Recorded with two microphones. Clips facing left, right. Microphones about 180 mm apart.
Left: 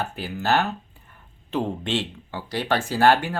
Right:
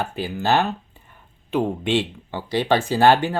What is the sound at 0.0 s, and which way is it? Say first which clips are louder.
Speech: right 3 dB; 15° right (ahead or behind).